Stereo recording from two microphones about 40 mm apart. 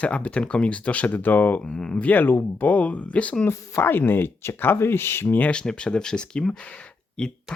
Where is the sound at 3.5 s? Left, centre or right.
Left.